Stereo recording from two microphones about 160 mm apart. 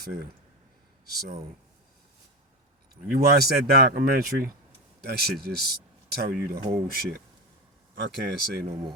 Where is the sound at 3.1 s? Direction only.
70° right (ahead or behind).